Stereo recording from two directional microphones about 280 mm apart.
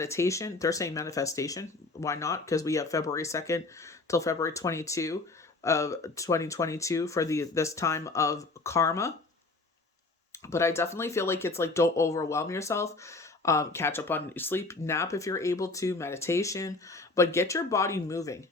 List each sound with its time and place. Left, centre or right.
0.0 s speech: centre
10.4 s speech: centre